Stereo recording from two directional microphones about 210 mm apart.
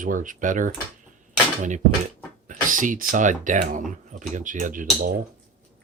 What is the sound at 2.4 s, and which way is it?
Speech, 40° right (ahead or behind).